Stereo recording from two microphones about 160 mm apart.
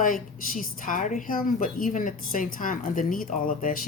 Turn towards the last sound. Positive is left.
turn(degrees=55)  # may be behind; listen again after turning